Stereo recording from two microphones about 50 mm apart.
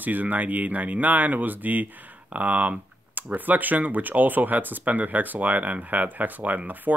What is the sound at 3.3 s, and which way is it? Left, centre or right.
Speech, right.